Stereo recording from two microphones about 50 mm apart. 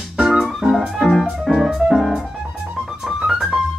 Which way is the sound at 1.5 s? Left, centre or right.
Centre.